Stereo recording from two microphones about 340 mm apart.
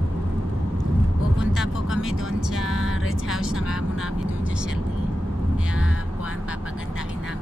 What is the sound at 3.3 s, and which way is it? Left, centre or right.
Vehicle, centre.